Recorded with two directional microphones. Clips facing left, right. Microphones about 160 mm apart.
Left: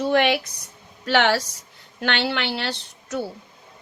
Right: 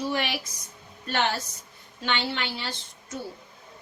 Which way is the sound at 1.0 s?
90° left.